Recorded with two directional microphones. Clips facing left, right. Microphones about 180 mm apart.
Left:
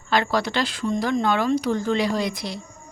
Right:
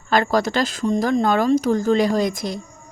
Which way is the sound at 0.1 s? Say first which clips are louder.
Right 4 dB; 45° right (ahead or behind).